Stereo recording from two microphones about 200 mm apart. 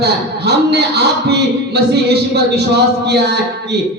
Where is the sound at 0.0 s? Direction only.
55° right (ahead or behind).